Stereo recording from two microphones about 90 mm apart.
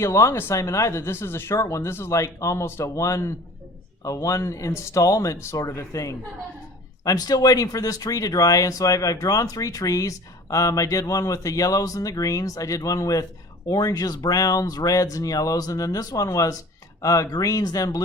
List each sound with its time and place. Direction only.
0.0 s speech: 35° left (ahead or behind)